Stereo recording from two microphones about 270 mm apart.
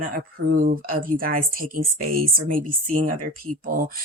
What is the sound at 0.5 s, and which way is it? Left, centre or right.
Speech, right.